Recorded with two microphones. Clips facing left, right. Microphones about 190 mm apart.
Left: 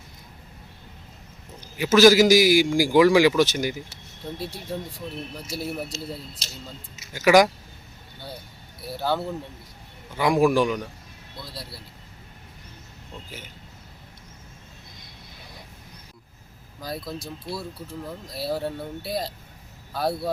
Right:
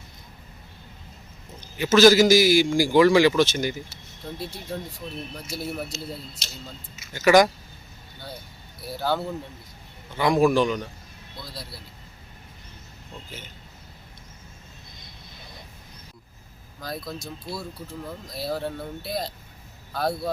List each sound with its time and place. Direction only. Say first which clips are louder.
1.6 s a man's voice: even; 10° left (ahead or behind)
5.5 s speech: left 1 dB; 35° left (ahead or behind)
7.1 s a man's voice: even; 10° left (ahead or behind)
9.0 s a man's voice: even; centre (ahead or behind)
16.8 s a man's voice: left 1 dB; 10° left (ahead or behind)